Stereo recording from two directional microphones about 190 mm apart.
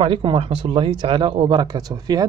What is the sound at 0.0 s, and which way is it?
Speech, 25° right (ahead or behind).